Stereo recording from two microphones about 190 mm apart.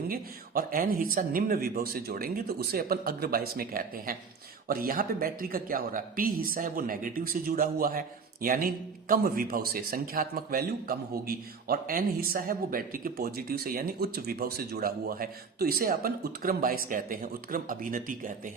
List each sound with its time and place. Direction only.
0.1 s speech: 50° right (ahead or behind)